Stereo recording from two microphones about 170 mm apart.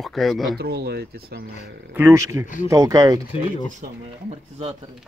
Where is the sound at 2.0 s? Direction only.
15° right (ahead or behind).